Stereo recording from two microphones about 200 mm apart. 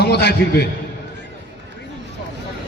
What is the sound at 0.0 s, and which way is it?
Speech, 55° left (ahead or behind).